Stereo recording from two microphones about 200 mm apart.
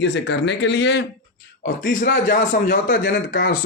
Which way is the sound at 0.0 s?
60° left (ahead or behind).